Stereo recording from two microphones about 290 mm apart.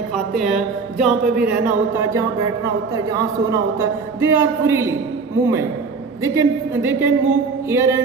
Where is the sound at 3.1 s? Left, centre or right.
Centre.